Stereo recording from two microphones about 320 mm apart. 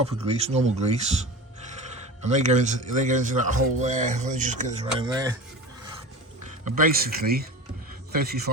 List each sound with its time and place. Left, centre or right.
0.0 s a man's voice: centre
2.2 s a man's voice: right
6.7 s a man's voice: right